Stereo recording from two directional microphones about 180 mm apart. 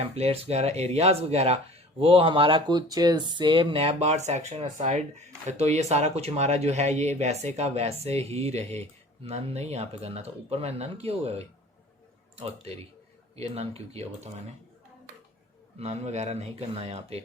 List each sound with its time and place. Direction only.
0.0 s speech: 35° right (ahead or behind)
15.8 s speech: 35° right (ahead or behind)